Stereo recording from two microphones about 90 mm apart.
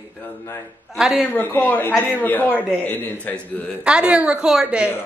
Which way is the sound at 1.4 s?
20° left (ahead or behind).